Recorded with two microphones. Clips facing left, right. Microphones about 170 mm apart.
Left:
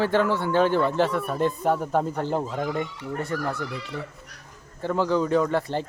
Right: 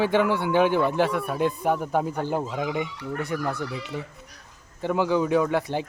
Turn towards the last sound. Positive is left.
turn(degrees=-10)  # may be behind; listen again after turning